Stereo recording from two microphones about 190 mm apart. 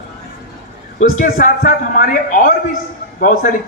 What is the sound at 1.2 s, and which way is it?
A man's voice, 45° left (ahead or behind).